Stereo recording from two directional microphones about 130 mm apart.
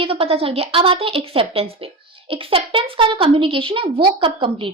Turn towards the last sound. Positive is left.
turn(degrees=-40)  # may be behind; listen again after turning